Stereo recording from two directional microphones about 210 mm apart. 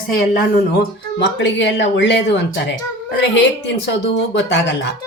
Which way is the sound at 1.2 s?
60° left (ahead or behind).